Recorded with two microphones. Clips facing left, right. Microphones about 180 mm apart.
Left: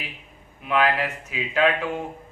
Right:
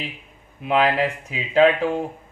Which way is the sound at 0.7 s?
30° right (ahead or behind).